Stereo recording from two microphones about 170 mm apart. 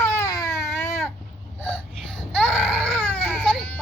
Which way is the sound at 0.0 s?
15° left (ahead or behind).